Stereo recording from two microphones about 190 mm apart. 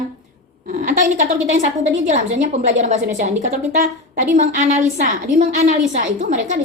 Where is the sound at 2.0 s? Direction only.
40° right (ahead or behind).